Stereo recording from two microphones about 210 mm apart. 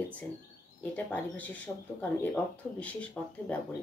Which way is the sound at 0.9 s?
5° left (ahead or behind).